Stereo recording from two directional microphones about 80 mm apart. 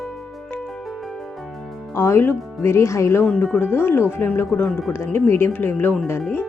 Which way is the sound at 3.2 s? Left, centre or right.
Left.